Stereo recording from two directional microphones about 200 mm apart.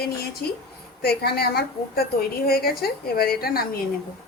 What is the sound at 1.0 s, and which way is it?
A woman's voice, 50° left (ahead or behind).